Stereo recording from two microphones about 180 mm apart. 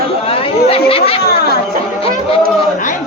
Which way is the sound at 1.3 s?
60° left (ahead or behind).